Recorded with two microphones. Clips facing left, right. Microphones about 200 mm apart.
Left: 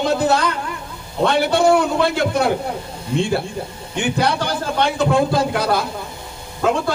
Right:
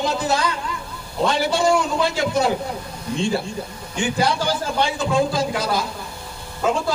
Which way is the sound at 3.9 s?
60° left (ahead or behind).